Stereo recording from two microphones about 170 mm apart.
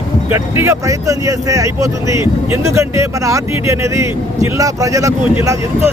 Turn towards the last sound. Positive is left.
turn(degrees=-15)  # may be behind; listen again after turning